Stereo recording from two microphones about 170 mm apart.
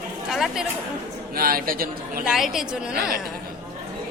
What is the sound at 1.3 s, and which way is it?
Speech, 60° right (ahead or behind).